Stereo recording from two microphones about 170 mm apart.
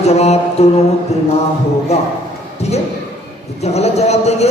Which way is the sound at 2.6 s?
40° left (ahead or behind).